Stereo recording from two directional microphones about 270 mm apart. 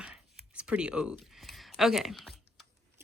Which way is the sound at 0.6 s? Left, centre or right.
Centre.